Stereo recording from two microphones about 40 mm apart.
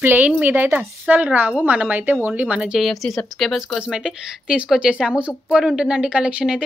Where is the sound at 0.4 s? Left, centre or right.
Right.